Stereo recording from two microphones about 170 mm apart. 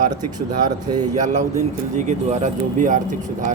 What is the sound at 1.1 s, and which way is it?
Speech, 45° right (ahead or behind).